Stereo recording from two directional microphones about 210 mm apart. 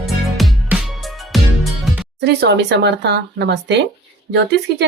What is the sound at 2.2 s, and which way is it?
A woman's voice, 55° right (ahead or behind).